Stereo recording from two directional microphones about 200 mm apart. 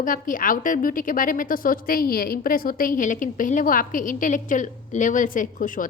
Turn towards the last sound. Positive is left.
turn(degrees=40)  # may be behind; listen again after turning